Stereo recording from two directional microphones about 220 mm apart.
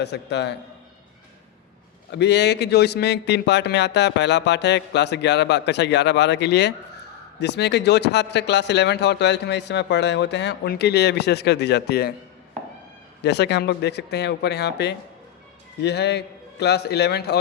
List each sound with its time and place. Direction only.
0.0 s speech: 50° left (ahead or behind)
2.1 s speech: 50° left (ahead or behind)
13.2 s speech: 50° left (ahead or behind)